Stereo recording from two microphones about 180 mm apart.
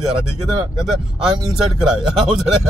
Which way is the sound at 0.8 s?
Centre (ahead or behind).